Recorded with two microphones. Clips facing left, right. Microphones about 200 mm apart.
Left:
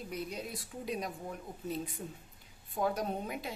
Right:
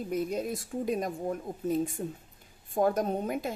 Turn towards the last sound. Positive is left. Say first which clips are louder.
# right 6 dB
turn(degrees=-45)  # may be behind; listen again after turning